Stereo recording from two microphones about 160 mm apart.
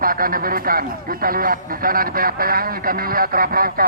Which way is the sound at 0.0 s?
65° right (ahead or behind).